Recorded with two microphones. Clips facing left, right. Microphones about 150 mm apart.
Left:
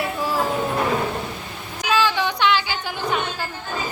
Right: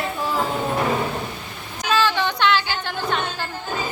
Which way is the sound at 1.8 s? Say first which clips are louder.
Even; 10° left (ahead or behind).